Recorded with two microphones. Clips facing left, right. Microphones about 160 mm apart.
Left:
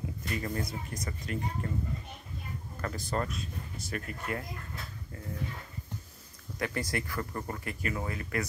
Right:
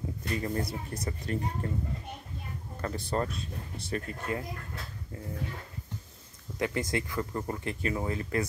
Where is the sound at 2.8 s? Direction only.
25° right (ahead or behind).